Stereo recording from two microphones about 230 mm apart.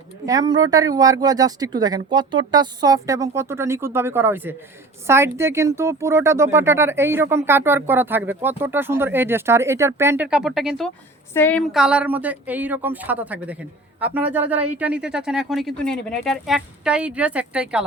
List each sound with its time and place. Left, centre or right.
0.3 s speech: centre